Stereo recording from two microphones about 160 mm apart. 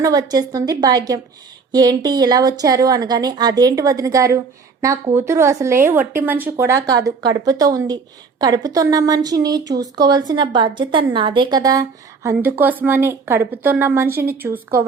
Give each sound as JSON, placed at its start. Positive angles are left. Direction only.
{"t": 0.0, "sound": "speech", "side_deg": -25}